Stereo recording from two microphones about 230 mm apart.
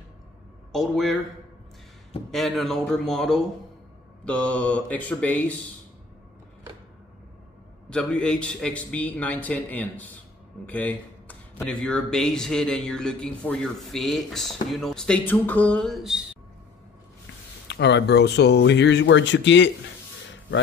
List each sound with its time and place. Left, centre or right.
0.7 s speech: centre
2.3 s speech: centre
7.9 s speech: centre
17.6 s speech: left